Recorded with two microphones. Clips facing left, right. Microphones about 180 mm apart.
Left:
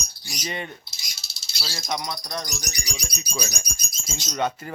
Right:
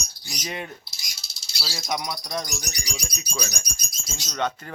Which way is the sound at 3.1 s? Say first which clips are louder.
Left 3 dB; 5° left (ahead or behind).